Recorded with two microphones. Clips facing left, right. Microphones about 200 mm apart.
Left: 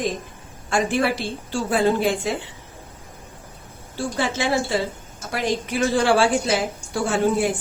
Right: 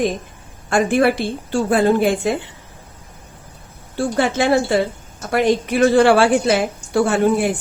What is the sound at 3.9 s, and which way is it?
A woman's voice, 60° right (ahead or behind).